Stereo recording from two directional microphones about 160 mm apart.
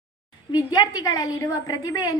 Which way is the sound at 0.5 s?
25° left (ahead or behind).